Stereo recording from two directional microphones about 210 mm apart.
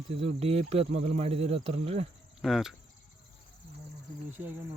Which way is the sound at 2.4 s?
Centre (ahead or behind).